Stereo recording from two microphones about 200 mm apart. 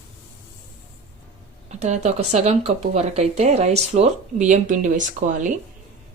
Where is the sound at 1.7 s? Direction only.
35° right (ahead or behind).